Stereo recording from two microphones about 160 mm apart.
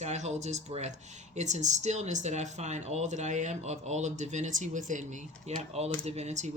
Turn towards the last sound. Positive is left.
turn(degrees=-45)  # may be behind; listen again after turning